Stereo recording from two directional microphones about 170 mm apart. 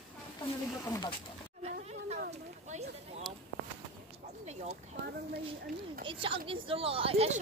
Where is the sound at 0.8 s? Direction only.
20° left (ahead or behind).